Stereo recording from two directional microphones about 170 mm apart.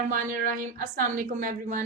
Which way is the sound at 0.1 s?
55° right (ahead or behind).